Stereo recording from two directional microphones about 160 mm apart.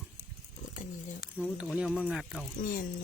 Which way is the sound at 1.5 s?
5° right (ahead or behind).